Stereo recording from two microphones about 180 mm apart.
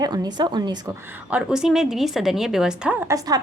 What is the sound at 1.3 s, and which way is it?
A woman's voice, 5° right (ahead or behind).